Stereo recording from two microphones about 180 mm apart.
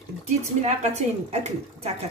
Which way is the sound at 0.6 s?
40° right (ahead or behind).